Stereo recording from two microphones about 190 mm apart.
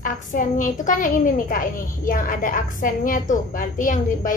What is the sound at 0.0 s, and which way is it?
A woman's voice, 45° left (ahead or behind).